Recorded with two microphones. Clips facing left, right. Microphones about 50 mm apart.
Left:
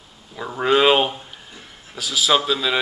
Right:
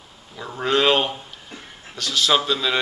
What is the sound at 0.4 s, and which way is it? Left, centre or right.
A man's voice, centre.